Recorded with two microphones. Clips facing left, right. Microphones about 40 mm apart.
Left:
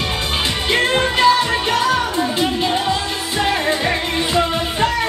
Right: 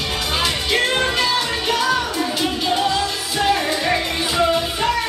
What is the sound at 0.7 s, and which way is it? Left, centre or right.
Music, left.